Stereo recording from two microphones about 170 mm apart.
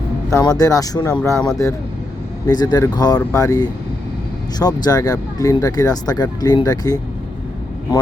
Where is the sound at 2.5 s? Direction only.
25° left (ahead or behind).